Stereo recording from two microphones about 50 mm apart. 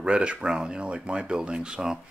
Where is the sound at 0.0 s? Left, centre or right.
Right.